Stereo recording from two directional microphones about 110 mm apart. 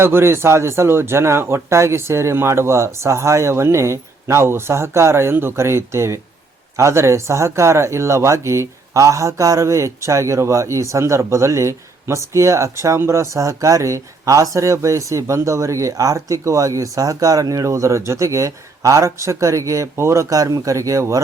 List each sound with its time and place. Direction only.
0.0 s speech: 25° right (ahead or behind)